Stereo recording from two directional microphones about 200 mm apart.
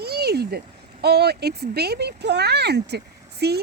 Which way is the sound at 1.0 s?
55° right (ahead or behind).